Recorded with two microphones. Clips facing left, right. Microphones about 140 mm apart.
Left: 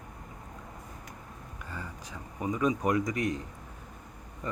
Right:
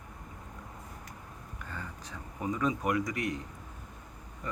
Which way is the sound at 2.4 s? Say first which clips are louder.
Left 3 dB; 15° left (ahead or behind).